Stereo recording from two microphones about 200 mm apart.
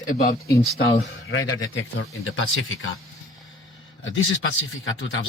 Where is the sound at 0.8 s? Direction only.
80° left.